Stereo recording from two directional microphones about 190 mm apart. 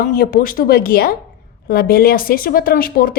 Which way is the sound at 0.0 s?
50° left (ahead or behind).